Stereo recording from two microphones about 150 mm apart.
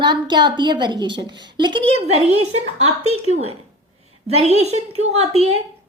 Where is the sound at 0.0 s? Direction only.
30° right (ahead or behind).